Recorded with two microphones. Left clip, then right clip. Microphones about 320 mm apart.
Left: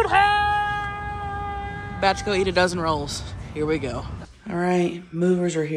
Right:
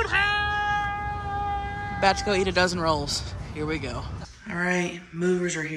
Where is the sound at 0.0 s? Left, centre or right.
Centre.